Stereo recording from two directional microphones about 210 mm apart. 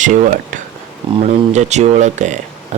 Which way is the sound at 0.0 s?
35° right (ahead or behind).